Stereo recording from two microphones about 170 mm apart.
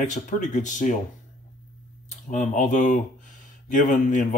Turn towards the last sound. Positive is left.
turn(degrees=45)  # may be behind; listen again after turning